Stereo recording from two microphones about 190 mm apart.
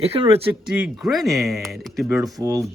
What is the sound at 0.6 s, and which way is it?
Speech, 5° right (ahead or behind).